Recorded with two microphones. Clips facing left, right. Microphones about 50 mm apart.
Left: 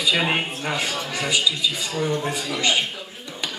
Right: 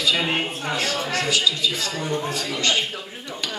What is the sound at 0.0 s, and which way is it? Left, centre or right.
A man's voice, centre.